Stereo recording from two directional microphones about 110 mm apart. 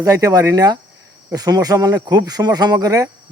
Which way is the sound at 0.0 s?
30° right (ahead or behind).